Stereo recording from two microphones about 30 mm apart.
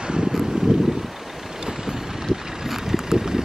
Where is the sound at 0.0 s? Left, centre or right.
Right.